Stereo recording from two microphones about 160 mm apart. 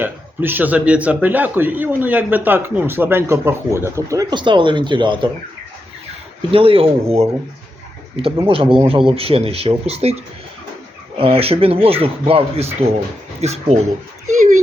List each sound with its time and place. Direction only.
0.0 s a man's voice: 10° right (ahead or behind); by 5.3 s 30° right (ahead or behind)
6.5 s speech: 35° right (ahead or behind)
8.4 s speech: 35° right (ahead or behind)
11.2 s speech: 35° right (ahead or behind)